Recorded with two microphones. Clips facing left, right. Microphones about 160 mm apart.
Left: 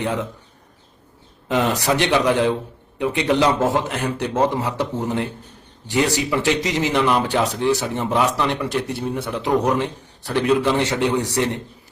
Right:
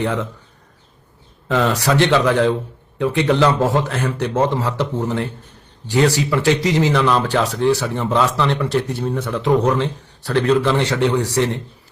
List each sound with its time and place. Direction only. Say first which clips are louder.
0.0 s a man's voice: right 2 dB; 15° left (ahead or behind)
1.5 s a man's voice: right 2 dB; 20° left (ahead or behind)